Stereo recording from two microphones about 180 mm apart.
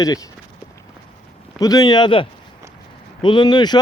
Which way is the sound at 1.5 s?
20° left (ahead or behind).